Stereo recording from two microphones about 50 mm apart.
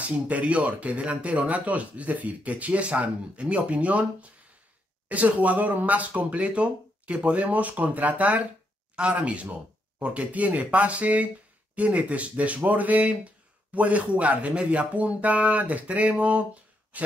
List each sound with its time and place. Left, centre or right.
0.0 s speech: right